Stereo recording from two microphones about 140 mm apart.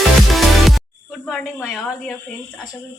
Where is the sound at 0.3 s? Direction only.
Centre (ahead or behind).